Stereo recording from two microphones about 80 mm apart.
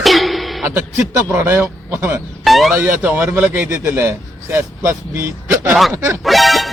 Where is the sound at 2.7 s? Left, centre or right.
Right.